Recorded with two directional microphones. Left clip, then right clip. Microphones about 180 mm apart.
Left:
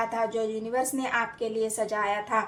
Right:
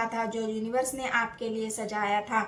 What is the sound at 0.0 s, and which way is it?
A woman's voice, 40° left (ahead or behind).